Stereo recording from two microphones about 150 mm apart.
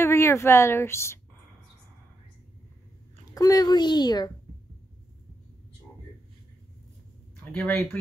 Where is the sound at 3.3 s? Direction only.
25° left (ahead or behind).